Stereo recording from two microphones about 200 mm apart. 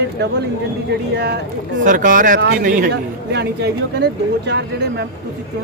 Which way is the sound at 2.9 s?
55° right (ahead or behind).